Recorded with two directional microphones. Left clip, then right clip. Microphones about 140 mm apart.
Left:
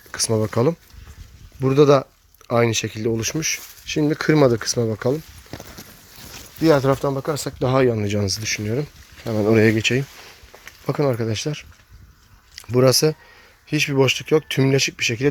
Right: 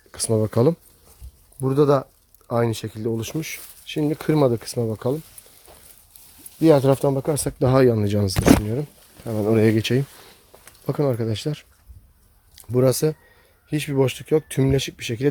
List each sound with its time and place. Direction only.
0.1 s speech: 20° right (ahead or behind)
0.5 s speech: 30° right (ahead or behind)
1.6 s speech: 5° left (ahead or behind)
3.2 s speech: 10° right (ahead or behind)
6.6 s speech: 45° right (ahead or behind)
7.0 s speech: 65° right (ahead or behind); by 8.2 s 40° right (ahead or behind)
8.6 s speech: 5° right (ahead or behind)
9.7 s speech: 35° right (ahead or behind)
10.8 s speech: 15° right (ahead or behind)
12.5 s speech: 10° right (ahead or behind)